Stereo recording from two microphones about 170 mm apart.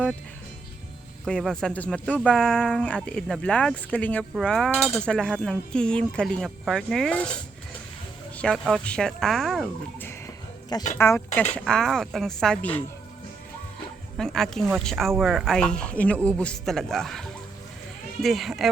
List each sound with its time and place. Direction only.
1.2 s speech: centre (ahead or behind)
8.4 s speech: 5° left (ahead or behind)
10.0 s a sound: 15° left (ahead or behind)
10.9 s speech: 15° left (ahead or behind)
11.5 s speech: 5° left (ahead or behind)
14.2 s speech: centre (ahead or behind)